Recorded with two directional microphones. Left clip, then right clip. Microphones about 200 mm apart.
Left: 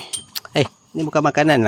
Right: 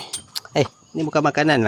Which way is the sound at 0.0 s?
10° left (ahead or behind).